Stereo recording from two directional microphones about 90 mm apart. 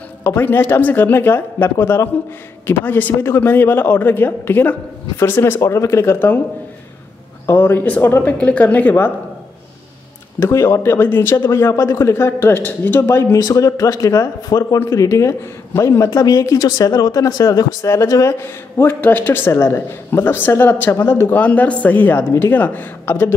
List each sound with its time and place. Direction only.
0.2 s a man's voice: 25° left (ahead or behind)
7.6 s a man's voice: 20° left (ahead or behind)
10.4 s a man's voice: 30° left (ahead or behind)
13.0 s speech: 35° left (ahead or behind)
16.1 s speech: 40° left (ahead or behind)
18.4 s a man's voice: 25° left (ahead or behind)